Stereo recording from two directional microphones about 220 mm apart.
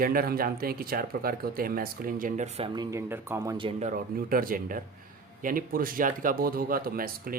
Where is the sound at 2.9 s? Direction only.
10° right (ahead or behind).